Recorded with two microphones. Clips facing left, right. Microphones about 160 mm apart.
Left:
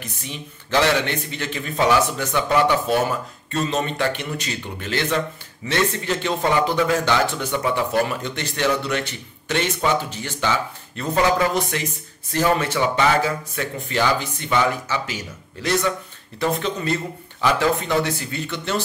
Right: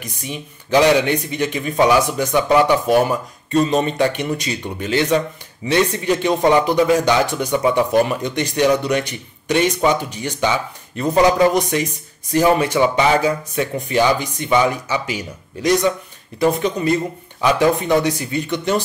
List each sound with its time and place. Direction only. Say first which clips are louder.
0.0 s speech: right 4 dB; 15° right (ahead or behind)